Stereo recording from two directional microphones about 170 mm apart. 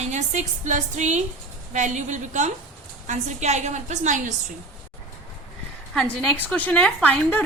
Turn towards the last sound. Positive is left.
turn(degrees=10)  # may be behind; listen again after turning